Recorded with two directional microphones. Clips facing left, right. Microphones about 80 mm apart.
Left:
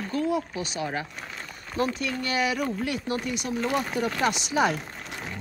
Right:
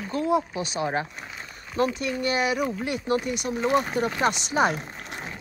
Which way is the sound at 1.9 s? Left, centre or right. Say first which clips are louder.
Right 2 dB; centre.